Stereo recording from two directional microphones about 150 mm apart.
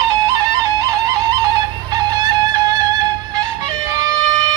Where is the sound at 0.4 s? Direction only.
25° right (ahead or behind).